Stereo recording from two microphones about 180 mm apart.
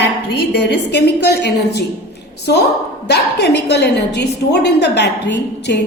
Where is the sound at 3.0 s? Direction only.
65° left (ahead or behind).